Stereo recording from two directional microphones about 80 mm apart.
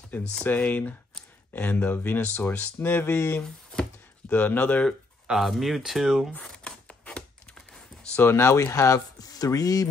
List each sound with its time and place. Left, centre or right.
0.1 s speech: left
5.2 s speech: centre
6.6 s typewriter: centre
8.2 s speech: left